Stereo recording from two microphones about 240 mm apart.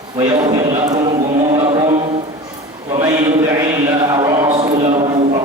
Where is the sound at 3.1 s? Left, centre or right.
Centre.